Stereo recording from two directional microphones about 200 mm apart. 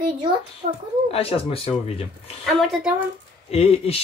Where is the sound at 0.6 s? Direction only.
40° right (ahead or behind).